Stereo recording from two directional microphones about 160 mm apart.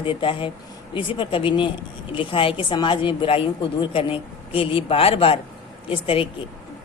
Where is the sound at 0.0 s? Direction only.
30° left (ahead or behind).